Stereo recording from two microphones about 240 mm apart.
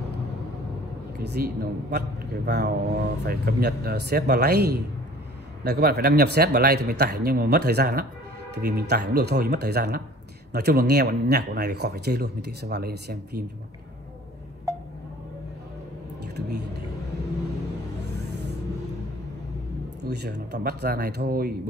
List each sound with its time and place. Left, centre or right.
1.2 s a man's voice: right
16.3 s speech: right
18.1 s a sound: right
20.1 s speech: right